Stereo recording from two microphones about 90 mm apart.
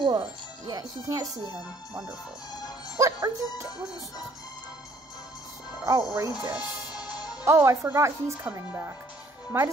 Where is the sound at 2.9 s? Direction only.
35° right (ahead or behind).